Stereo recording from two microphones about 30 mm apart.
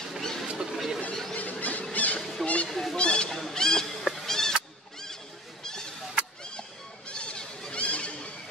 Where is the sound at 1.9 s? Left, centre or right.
Left.